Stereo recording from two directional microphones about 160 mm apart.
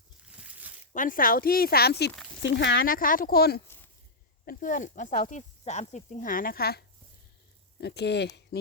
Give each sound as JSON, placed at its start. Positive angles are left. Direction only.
{"t": 0.3, "sound": "a sound", "side_deg": -5}
{"t": 0.9, "sound": "speech", "side_deg": 60}
{"t": 4.4, "sound": "speech", "side_deg": 55}
{"t": 7.8, "sound": "speech", "side_deg": 90}